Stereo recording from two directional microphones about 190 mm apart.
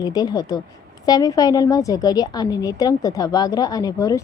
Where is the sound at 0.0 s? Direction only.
20° left (ahead or behind).